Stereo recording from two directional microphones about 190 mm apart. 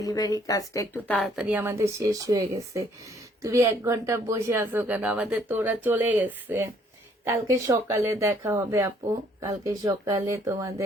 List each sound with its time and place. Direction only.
0.0 s speech: 20° left (ahead or behind); by 10.8 s 15° right (ahead or behind)